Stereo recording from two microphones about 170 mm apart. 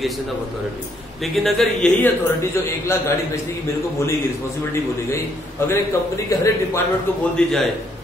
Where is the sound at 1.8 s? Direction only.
15° left (ahead or behind).